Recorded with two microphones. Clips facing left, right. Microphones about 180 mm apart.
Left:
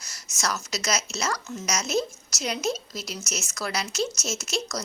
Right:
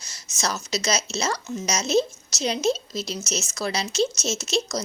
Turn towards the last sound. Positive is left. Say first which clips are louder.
# right 4 dB
turn(degrees=-25)  # may be behind; listen again after turning